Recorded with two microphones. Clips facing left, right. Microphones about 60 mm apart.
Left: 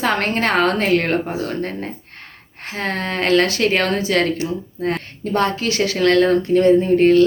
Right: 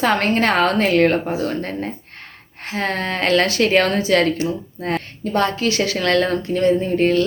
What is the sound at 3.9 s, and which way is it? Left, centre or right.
A woman's voice, centre.